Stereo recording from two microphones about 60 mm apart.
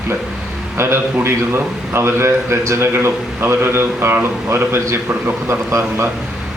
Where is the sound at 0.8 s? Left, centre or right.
Right.